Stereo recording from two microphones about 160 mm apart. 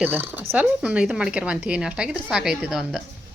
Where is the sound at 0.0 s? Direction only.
10° right (ahead or behind).